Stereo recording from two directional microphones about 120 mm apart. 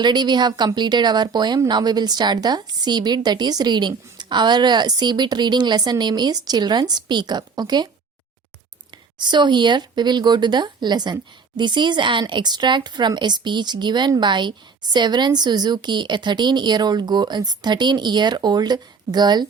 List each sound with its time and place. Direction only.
0.0 s speech: 35° right (ahead or behind)
9.1 s speech: 40° right (ahead or behind)